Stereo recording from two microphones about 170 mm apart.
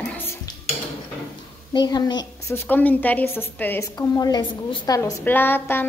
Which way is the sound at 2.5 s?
10° left (ahead or behind).